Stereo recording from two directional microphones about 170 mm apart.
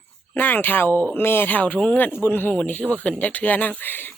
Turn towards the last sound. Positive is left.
turn(degrees=10)  # may be behind; listen again after turning